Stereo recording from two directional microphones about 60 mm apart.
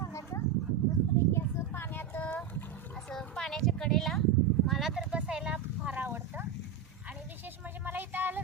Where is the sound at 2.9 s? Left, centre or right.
Centre.